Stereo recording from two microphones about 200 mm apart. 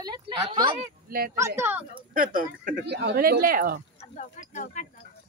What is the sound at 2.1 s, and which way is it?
Speech, 45° right (ahead or behind).